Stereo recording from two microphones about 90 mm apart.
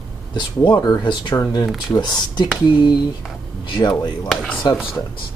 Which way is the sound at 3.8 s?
55° left (ahead or behind).